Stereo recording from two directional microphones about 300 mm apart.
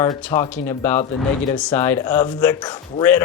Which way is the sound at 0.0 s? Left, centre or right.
Centre.